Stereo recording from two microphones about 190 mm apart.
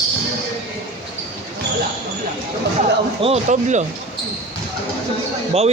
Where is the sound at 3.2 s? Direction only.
35° right (ahead or behind).